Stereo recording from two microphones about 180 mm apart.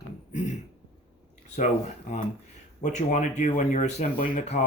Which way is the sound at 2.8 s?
45° left (ahead or behind).